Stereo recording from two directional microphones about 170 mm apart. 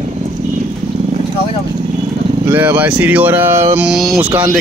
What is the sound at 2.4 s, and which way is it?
Speech, 10° right (ahead or behind).